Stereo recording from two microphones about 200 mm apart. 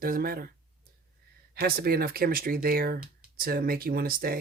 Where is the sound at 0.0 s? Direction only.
45° right (ahead or behind).